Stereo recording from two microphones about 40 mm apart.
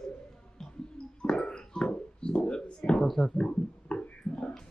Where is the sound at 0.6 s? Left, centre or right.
Centre.